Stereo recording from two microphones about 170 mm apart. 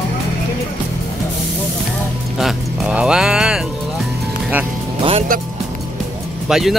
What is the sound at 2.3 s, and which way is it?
Music, 5° right (ahead or behind).